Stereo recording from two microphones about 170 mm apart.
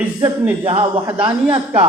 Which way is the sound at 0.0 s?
10° right (ahead or behind).